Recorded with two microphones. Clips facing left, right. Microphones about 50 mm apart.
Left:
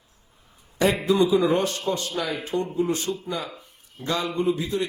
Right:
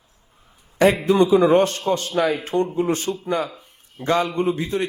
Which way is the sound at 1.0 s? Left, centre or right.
Right.